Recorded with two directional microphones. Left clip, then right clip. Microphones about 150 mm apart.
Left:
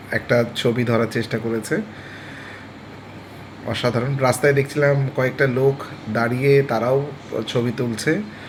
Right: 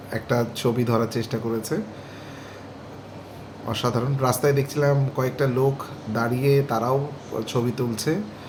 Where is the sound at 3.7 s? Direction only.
10° right (ahead or behind).